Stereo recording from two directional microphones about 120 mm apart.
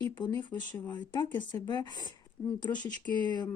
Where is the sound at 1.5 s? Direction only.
40° left (ahead or behind).